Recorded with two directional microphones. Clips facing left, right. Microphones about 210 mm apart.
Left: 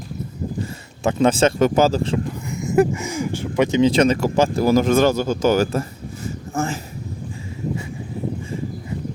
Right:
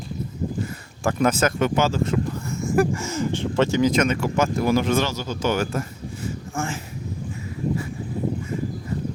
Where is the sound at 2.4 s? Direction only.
15° left (ahead or behind).